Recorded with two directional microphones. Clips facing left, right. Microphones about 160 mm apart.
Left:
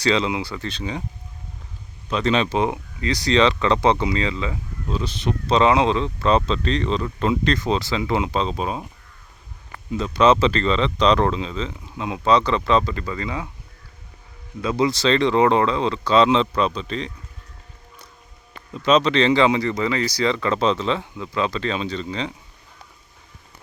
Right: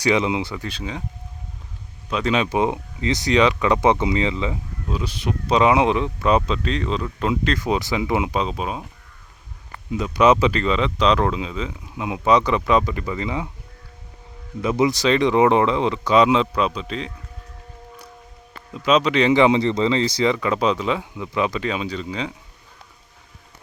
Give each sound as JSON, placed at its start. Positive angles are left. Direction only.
{"t": 0.0, "sound": "speech", "side_deg": -20}
{"t": 2.0, "sound": "speech", "side_deg": -5}
{"t": 9.9, "sound": "speech", "side_deg": -15}
{"t": 14.6, "sound": "speech", "side_deg": -20}
{"t": 18.7, "sound": "speech", "side_deg": -5}